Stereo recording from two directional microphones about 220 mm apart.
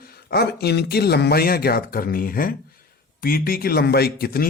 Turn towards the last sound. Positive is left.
turn(degrees=45)  # may be behind; listen again after turning